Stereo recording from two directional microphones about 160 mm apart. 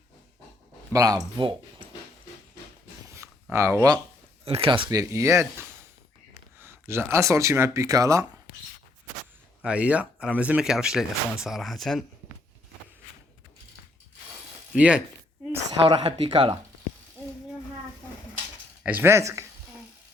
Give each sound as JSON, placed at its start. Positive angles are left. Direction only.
{"t": 0.9, "sound": "speech", "side_deg": -20}
{"t": 3.5, "sound": "speech", "side_deg": -20}
{"t": 4.4, "sound": "speech", "side_deg": -35}
{"t": 9.6, "sound": "speech", "side_deg": -5}
{"t": 14.7, "sound": "speech", "side_deg": -5}
{"t": 15.9, "sound": "speech", "side_deg": -30}
{"t": 18.8, "sound": "speech", "side_deg": -10}